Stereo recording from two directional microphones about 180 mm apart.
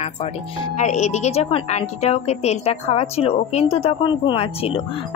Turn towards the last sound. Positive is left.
turn(degrees=35)  # may be behind; listen again after turning